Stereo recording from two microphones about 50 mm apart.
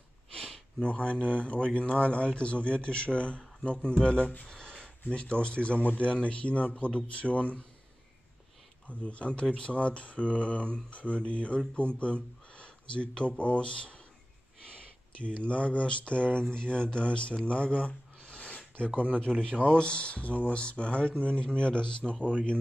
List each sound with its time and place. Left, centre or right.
0.8 s speech: left
4.5 s speech: centre
8.8 s speech: left
15.1 s speech: left
18.9 s speech: right
19.6 s speech: left